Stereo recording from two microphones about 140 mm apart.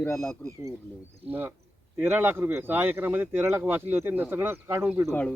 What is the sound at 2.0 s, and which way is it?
Speech, 15° right (ahead or behind).